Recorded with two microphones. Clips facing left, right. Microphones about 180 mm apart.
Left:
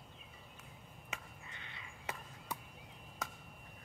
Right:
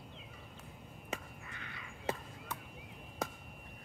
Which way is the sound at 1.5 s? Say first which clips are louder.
Right 5 dB; 25° left (ahead or behind).